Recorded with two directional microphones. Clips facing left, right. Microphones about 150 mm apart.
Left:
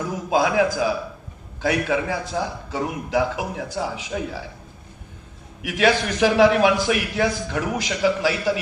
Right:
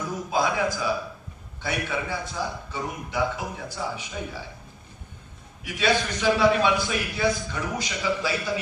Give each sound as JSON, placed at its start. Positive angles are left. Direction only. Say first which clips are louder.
{"t": 0.3, "sound": "a man's voice", "louder": "left 6 dB", "side_deg": 90}
{"t": 5.6, "sound": "a man's voice", "louder": "left 5 dB", "side_deg": 90}